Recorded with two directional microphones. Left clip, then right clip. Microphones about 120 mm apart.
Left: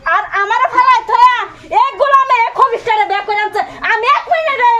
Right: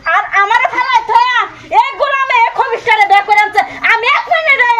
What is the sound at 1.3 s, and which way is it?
A woman's voice, 25° left (ahead or behind).